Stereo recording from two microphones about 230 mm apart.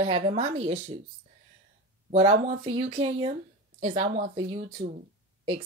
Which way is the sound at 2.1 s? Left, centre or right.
Right.